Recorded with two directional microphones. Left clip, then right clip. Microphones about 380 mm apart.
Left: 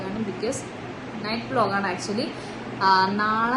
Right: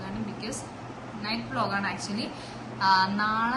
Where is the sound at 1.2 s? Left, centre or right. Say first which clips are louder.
Left 6 dB; centre.